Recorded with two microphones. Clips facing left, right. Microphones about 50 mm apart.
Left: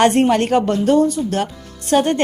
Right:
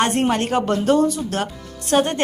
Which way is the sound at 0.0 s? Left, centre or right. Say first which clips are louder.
Left 6 dB; left.